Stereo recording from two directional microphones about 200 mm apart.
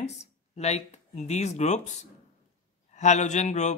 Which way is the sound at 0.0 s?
35° left (ahead or behind).